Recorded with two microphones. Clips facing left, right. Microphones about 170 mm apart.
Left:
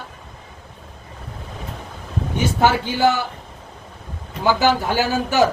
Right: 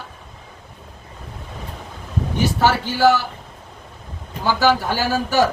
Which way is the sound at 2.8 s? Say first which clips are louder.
Right 2 dB; 20° left (ahead or behind).